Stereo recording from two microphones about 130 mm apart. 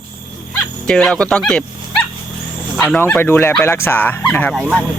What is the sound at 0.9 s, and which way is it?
Speech, 5° left (ahead or behind).